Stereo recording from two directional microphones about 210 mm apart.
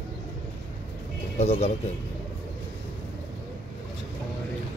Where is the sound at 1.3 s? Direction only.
30° left (ahead or behind).